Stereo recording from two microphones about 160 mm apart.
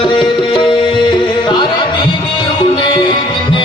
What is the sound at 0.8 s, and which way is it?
Music, 30° left (ahead or behind).